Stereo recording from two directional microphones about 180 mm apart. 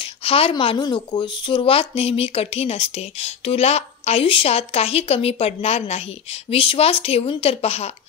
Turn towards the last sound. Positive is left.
turn(degrees=35)  # may be behind; listen again after turning